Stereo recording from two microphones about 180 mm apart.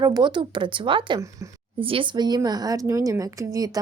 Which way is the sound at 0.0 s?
25° right (ahead or behind).